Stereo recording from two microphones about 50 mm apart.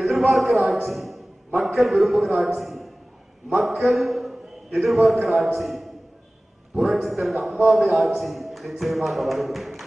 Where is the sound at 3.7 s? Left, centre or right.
Right.